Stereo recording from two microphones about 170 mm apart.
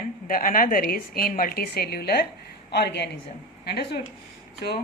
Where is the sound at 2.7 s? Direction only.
80° left.